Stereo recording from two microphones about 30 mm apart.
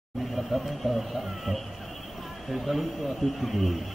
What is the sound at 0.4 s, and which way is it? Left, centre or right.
Speech, centre.